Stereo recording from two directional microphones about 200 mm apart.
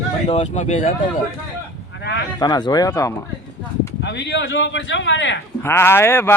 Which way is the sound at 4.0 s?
60° left (ahead or behind).